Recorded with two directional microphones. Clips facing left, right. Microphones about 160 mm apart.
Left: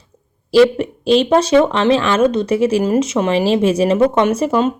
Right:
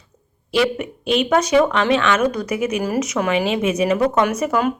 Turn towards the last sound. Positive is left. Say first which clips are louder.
# left 4 dB
turn(degrees=25)  # may be behind; listen again after turning